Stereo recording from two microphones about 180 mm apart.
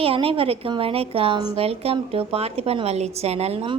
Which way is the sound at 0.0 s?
30° right (ahead or behind).